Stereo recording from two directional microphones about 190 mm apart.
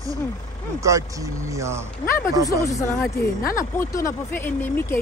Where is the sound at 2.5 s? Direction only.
15° left (ahead or behind).